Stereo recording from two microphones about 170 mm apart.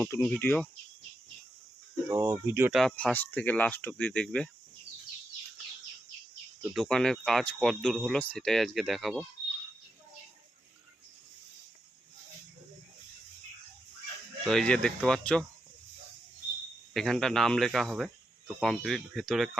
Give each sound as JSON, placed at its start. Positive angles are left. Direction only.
{"t": 0.0, "sound": "speech", "side_deg": 10}
{"t": 2.0, "sound": "speech", "side_deg": -20}
{"t": 2.7, "sound": "speech", "side_deg": 5}
{"t": 6.7, "sound": "speech", "side_deg": 5}
{"t": 14.4, "sound": "speech", "side_deg": 5}
{"t": 16.9, "sound": "speech", "side_deg": 0}